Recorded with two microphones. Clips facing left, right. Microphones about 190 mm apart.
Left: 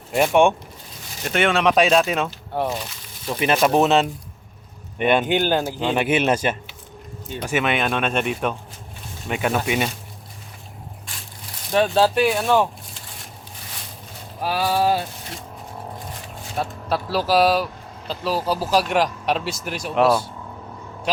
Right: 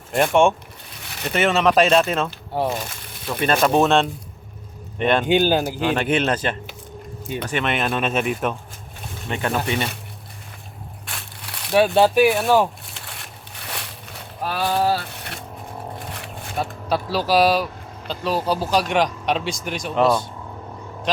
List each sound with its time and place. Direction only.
0.1 s speech: centre (ahead or behind)
1.0 s a sound: 65° right (ahead or behind)
1.3 s speech: centre (ahead or behind)
2.6 s speech: 50° right (ahead or behind)
3.4 s speech: 5° left (ahead or behind)
5.2 s speech: 15° right (ahead or behind)
5.9 s speech: 10° left (ahead or behind)
9.3 s speech: 10° left (ahead or behind)
11.0 s crushing: 65° right (ahead or behind)
11.7 s speech: 10° right (ahead or behind)
12.9 s crushing: 65° right (ahead or behind)
14.4 s speech: 5° left (ahead or behind)
15.1 s vehicle: 65° right (ahead or behind)
16.6 s speech: centre (ahead or behind)